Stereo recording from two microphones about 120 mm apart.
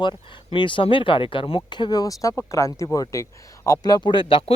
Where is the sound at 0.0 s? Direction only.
40° left (ahead or behind).